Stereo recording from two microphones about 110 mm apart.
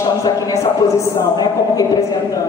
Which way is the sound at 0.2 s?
30° left (ahead or behind).